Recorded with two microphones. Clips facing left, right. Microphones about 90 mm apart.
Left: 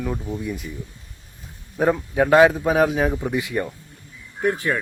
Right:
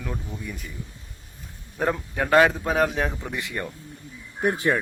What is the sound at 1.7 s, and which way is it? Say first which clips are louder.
A man's voice: left 6 dB; 5° left (ahead or behind).